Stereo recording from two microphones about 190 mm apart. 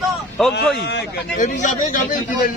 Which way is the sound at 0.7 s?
65° left (ahead or behind).